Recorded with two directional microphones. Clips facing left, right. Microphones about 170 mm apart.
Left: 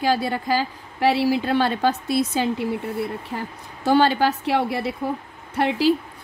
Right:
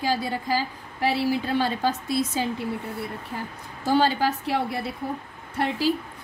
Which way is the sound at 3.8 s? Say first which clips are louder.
Left 4 dB; 70° left (ahead or behind).